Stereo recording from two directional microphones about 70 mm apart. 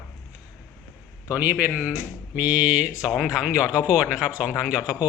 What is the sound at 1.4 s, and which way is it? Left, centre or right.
A man's voice, right.